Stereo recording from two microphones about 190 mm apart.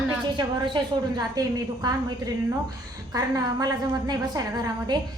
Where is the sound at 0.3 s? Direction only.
25° right (ahead or behind).